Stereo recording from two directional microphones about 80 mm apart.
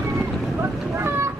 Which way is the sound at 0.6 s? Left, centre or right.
Right.